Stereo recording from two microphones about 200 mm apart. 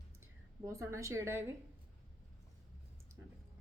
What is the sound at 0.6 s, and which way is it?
Speech, 15° right (ahead or behind).